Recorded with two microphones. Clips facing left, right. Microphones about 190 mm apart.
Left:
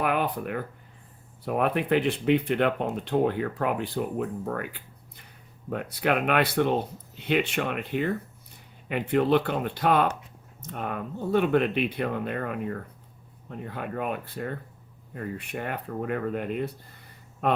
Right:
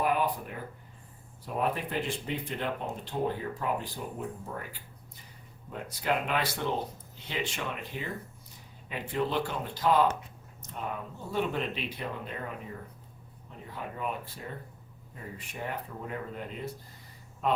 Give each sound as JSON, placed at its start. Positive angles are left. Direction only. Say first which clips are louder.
{"t": 0.0, "sound": "speech", "louder": "left 2 dB", "side_deg": 70}